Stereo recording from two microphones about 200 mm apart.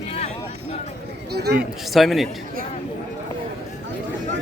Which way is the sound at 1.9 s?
Centre (ahead or behind).